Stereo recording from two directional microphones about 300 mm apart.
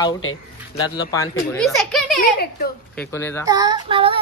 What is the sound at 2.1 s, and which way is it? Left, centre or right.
Speech, left.